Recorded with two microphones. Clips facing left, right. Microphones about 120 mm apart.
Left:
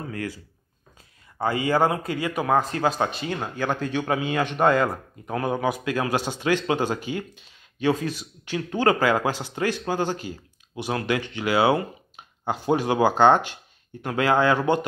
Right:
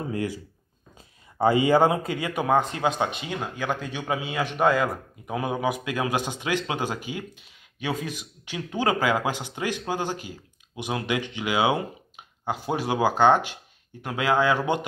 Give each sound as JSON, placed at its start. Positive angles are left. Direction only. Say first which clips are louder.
{"t": 0.0, "sound": "speech", "louder": "right 3 dB", "side_deg": -20}
{"t": 2.8, "sound": "speech", "louder": "left 1 dB", "side_deg": 35}
{"t": 3.1, "sound": "a man's voice", "louder": "left 2 dB", "side_deg": -15}